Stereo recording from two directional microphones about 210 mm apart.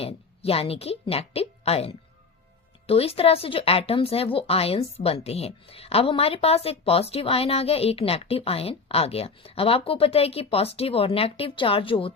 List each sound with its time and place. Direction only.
0.0 s a woman's voice: 30° left (ahead or behind)